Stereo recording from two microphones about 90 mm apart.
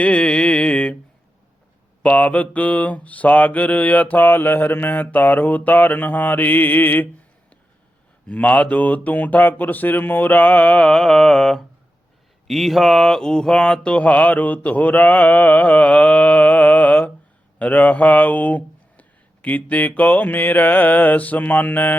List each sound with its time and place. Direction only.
0.0 s mantra: 10° left (ahead or behind)
2.0 s mantra: 15° left (ahead or behind)
8.3 s speech: 15° left (ahead or behind)